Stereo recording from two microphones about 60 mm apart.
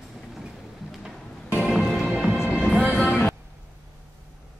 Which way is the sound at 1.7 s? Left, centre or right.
Centre.